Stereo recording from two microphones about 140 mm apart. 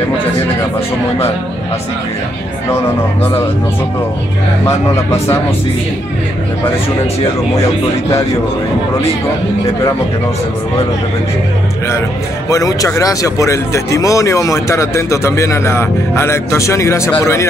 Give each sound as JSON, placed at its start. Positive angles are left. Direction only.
{"t": 12.4, "sound": "speech", "side_deg": 25}